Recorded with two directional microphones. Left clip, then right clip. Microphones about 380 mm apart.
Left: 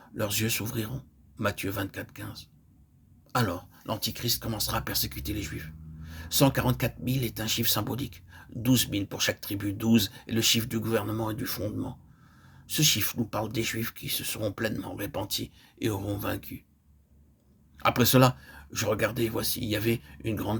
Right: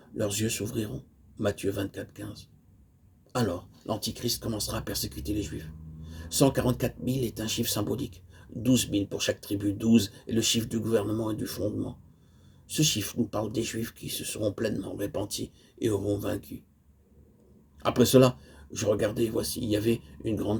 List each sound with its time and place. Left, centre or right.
0.2 s speech: left
17.7 s speech: left